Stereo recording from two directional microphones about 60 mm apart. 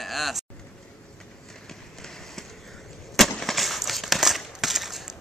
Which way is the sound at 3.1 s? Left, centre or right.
Centre.